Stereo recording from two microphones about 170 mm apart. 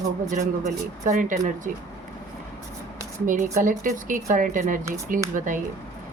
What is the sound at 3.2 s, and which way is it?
Speech, 50° right (ahead or behind).